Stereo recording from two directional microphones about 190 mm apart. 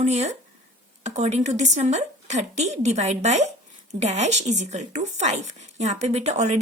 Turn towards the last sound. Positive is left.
turn(degrees=-35)  # may be behind; listen again after turning